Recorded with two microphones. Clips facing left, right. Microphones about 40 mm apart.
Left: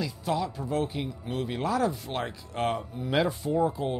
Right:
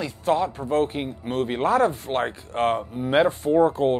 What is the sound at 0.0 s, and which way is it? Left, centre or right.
Speech, right.